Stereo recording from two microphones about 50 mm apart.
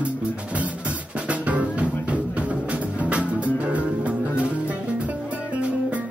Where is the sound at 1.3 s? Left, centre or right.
Right.